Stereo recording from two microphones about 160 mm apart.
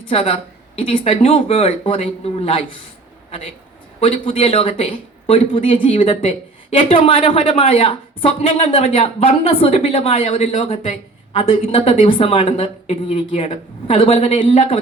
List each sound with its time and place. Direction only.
0.0 s speech: 35° left (ahead or behind)
4.0 s speech: 35° left (ahead or behind)